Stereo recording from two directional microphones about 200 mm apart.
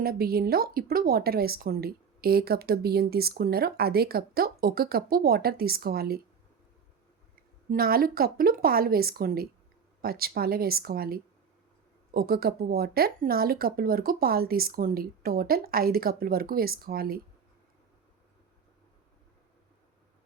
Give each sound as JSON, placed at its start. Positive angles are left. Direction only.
{"t": 0.0, "sound": "speech", "side_deg": -50}
{"t": 7.7, "sound": "speech", "side_deg": -50}